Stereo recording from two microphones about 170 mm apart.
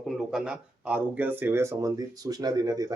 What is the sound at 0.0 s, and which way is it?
Speech, 5° right (ahead or behind).